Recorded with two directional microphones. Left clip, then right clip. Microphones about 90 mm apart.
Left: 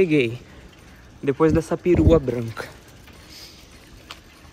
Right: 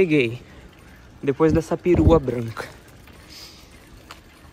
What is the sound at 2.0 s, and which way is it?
Speech, 65° right (ahead or behind).